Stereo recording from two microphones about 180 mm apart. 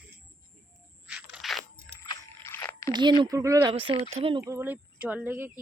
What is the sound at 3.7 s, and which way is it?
Speech, 30° right (ahead or behind).